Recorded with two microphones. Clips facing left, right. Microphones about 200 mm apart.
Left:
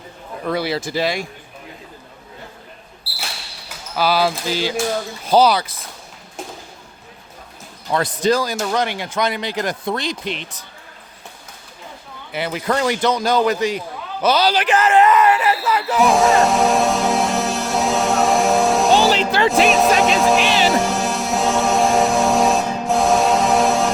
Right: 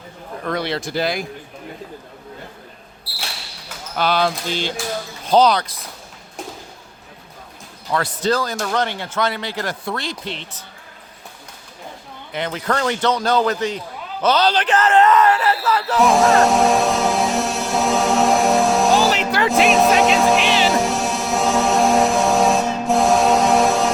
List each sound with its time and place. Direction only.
0.4 s speech: 5° left (ahead or behind)
3.9 s speech: 5° left (ahead or behind)
7.9 s speech: 20° left (ahead or behind)
12.3 s a man's voice: 10° left (ahead or behind)
19.1 s music: 25° left (ahead or behind)
19.5 s music: centre (ahead or behind)